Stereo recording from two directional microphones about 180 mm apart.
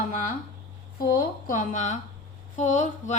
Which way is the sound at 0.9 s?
50° left (ahead or behind).